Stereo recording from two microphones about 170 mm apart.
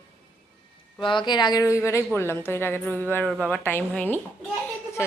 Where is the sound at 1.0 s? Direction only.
30° left (ahead or behind).